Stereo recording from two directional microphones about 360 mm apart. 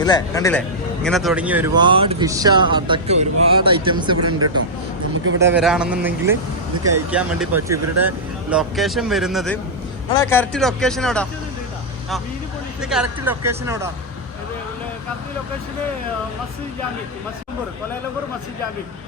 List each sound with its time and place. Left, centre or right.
0.0 s speech: centre
4.2 s speech: right
5.4 s speech: centre
12.9 s speech: centre